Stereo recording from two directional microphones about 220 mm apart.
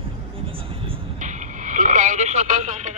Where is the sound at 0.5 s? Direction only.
30° right (ahead or behind).